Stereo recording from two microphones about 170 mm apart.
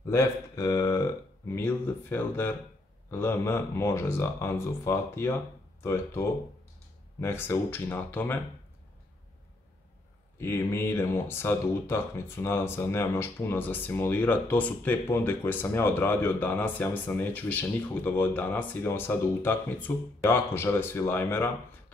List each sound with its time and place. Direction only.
0.0 s speech: 15° left (ahead or behind)
10.4 s speech: 15° left (ahead or behind)